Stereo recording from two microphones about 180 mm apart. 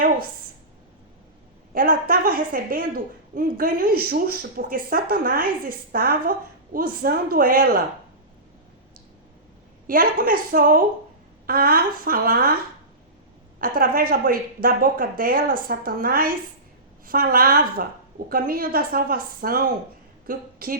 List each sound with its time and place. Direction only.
1.7 s a woman's voice: 55° right (ahead or behind)
9.8 s speech: 50° right (ahead or behind)
13.6 s a woman's voice: 55° right (ahead or behind)